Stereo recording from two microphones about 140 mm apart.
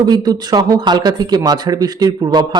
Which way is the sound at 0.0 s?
30° right (ahead or behind).